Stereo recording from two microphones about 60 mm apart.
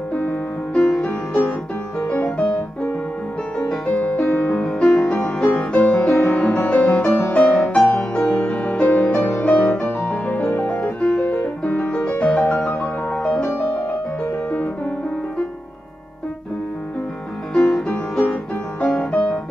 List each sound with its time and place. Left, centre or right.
0.1 s music: left
0.8 s music: centre
2.0 s music: left
3.5 s music: centre
7.2 s music: left
9.1 s music: left
12.5 s music: centre
17.6 s music: centre